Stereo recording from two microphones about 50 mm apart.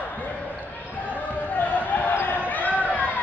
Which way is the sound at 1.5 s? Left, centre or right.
Left.